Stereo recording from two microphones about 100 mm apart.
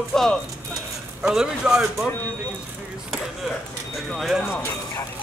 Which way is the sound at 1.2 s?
5° right (ahead or behind).